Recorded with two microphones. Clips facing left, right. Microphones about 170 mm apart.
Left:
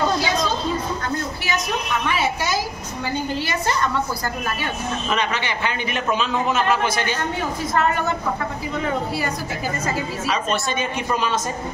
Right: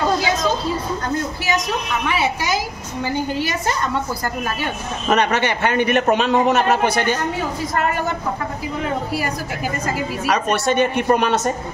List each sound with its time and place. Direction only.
2.0 s a sound: 15° right (ahead or behind)
5.0 s a man's voice: 55° right (ahead or behind)
10.3 s a man's voice: 65° right (ahead or behind)